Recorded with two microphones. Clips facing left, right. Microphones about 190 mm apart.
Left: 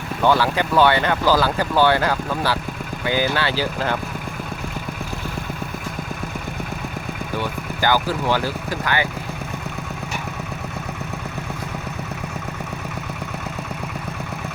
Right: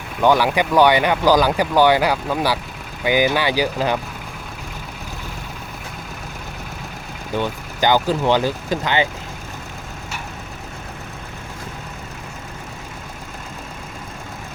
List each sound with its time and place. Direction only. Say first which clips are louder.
0.2 s speech: right 2 dB; 15° right (ahead or behind)
7.8 s speech: right 3 dB; 20° right (ahead or behind)